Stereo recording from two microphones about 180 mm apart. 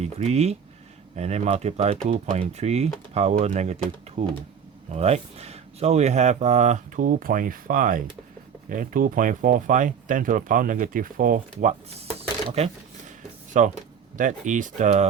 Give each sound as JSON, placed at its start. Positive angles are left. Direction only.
{"t": 0.0, "sound": "speech", "side_deg": -35}